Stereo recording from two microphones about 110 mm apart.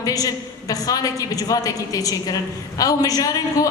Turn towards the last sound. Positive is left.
turn(degrees=35)  # may be behind; listen again after turning